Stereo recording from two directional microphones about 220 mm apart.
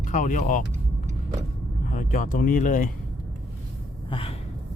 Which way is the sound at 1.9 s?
40° left (ahead or behind).